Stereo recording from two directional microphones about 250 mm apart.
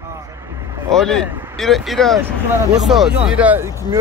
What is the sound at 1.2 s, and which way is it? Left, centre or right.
Speech, centre.